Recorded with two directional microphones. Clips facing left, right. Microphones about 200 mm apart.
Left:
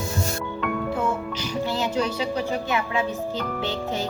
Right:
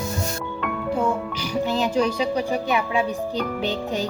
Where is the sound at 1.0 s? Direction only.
15° right (ahead or behind).